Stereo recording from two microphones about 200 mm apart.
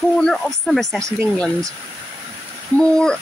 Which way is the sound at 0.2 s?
5° left (ahead or behind).